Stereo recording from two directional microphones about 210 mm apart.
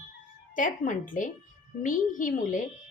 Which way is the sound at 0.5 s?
40° left (ahead or behind).